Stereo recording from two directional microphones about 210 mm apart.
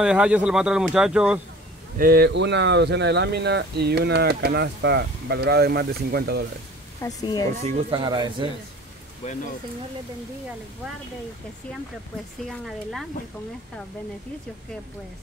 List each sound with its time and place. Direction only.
0.0 s speech: 5° right (ahead or behind)
2.0 s speech: 50° right (ahead or behind)
7.0 s speech: 15° left (ahead or behind)
7.6 s speech: 25° right (ahead or behind)
12.4 s speech: centre (ahead or behind)